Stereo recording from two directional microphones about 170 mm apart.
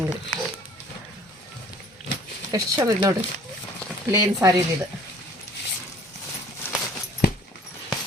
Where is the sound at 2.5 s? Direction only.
20° right (ahead or behind).